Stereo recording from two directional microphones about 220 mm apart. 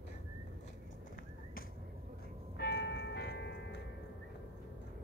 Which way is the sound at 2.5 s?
50° left (ahead or behind).